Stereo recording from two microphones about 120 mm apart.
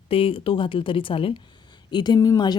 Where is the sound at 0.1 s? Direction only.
50° left (ahead or behind).